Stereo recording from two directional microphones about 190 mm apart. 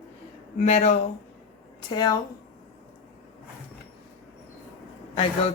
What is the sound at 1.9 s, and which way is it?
Speech, 20° left (ahead or behind).